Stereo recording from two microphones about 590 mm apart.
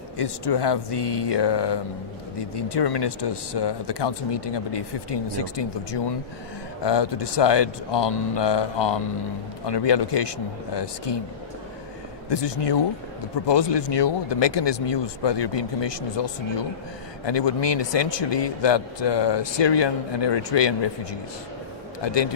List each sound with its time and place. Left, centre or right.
0.2 s speech: left
12.3 s speech: left